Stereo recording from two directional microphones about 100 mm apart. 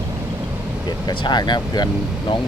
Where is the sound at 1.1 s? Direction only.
45° left (ahead or behind).